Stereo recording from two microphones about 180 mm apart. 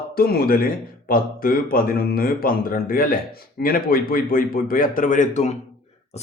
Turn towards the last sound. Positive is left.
turn(degrees=40)  # may be behind; listen again after turning